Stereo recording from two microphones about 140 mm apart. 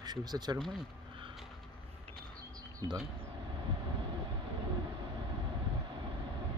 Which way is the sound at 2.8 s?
35° right (ahead or behind).